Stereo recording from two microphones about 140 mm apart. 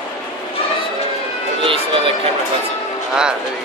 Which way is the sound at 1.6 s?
40° right (ahead or behind).